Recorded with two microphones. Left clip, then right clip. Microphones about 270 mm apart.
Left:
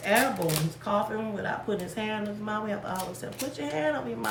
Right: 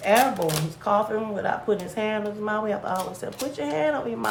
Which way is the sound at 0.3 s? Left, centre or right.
Centre.